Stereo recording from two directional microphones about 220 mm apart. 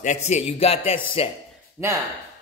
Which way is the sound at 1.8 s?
10° right (ahead or behind).